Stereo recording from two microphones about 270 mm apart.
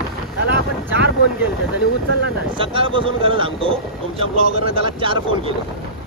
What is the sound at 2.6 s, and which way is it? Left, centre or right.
Speech, centre.